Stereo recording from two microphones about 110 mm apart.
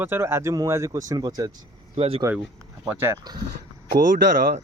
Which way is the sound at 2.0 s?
65° right (ahead or behind).